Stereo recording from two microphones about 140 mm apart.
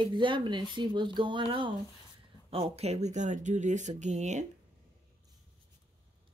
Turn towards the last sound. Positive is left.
turn(degrees=-55)  # may be behind; listen again after turning